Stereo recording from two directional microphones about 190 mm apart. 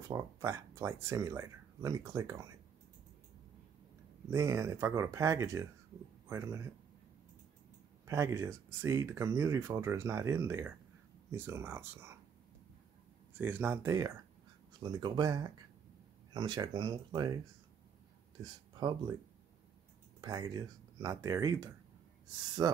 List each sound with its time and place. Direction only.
0.1 s speech: 15° right (ahead or behind)
4.3 s speech: 15° right (ahead or behind)
8.1 s speech: 15° right (ahead or behind)
13.4 s speech: 10° right (ahead or behind)
18.4 s speech: 20° right (ahead or behind)
20.2 s speech: 20° right (ahead or behind)